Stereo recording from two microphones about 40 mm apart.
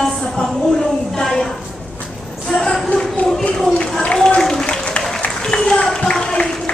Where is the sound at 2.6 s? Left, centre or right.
Centre.